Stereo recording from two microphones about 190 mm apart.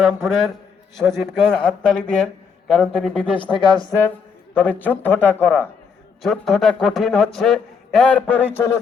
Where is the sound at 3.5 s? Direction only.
25° left (ahead or behind).